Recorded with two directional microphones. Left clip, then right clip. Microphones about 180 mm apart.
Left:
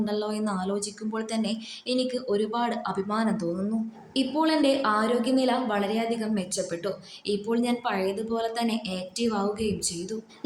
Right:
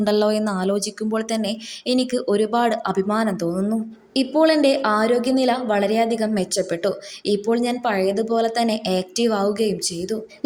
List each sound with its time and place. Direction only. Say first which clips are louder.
0.0 s a woman's voice: right 10 dB; 45° right (ahead or behind)